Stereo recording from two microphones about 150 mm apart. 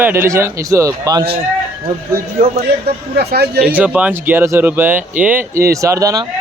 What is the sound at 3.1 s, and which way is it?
Speech, 90° right.